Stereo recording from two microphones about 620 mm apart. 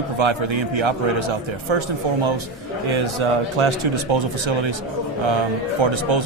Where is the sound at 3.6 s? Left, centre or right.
Right.